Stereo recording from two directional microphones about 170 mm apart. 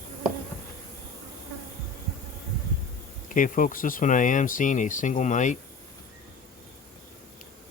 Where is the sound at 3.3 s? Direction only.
50° left (ahead or behind).